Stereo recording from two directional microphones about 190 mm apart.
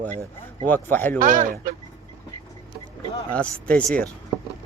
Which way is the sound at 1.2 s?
45° right (ahead or behind).